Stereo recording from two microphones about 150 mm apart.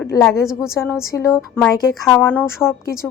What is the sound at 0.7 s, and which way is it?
Speech, 15° left (ahead or behind).